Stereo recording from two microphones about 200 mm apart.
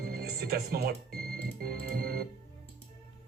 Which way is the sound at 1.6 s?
50° right (ahead or behind).